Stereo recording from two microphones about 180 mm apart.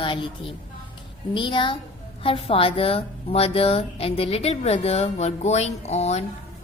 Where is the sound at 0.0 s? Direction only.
30° left (ahead or behind).